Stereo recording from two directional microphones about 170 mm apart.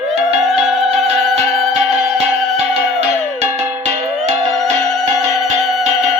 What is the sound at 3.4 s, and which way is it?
Music, 40° right (ahead or behind).